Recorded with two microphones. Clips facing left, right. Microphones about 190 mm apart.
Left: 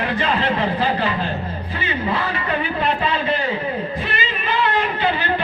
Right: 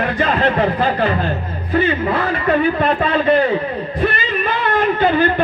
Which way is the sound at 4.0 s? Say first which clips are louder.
Right 7 dB; 55° right (ahead or behind).